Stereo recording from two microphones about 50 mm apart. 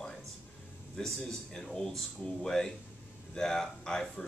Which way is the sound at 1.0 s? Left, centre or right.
Centre.